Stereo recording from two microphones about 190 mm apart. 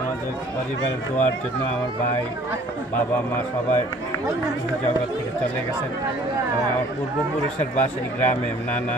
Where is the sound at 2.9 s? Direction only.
10° left (ahead or behind).